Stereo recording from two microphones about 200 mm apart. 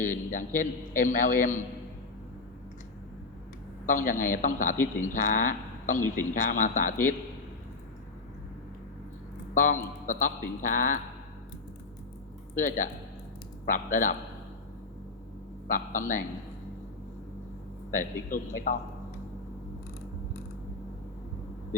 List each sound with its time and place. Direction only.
0.0 s a man's voice: 40° left (ahead or behind)
3.8 s a man's voice: 40° left (ahead or behind)
4.8 s speech: 10° left (ahead or behind)
5.1 s a man's voice: 40° left (ahead or behind)
9.6 s a man's voice: 40° left (ahead or behind)
12.5 s a man's voice: 40° left (ahead or behind)
15.7 s a man's voice: 40° left (ahead or behind)
17.9 s a man's voice: 40° left (ahead or behind)